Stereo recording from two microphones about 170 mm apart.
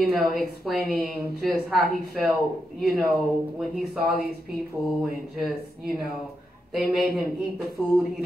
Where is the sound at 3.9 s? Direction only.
65° right (ahead or behind).